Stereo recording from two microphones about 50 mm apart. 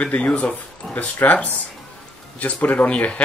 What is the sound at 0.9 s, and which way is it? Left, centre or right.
A man's voice, left.